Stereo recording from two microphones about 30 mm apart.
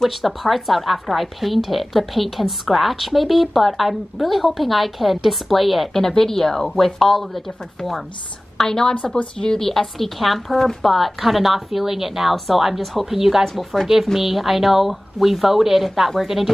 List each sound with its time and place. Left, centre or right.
0.0 s a woman's voice: centre
5.9 s a woman's voice: centre
8.5 s a woman's voice: centre